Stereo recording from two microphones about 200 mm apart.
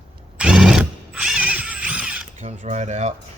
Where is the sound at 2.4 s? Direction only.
35° right (ahead or behind).